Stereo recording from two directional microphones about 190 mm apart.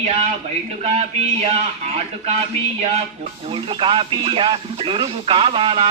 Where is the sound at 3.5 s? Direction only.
30° right (ahead or behind).